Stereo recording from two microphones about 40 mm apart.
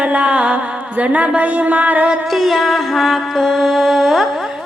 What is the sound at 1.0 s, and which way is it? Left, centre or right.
Speech, right.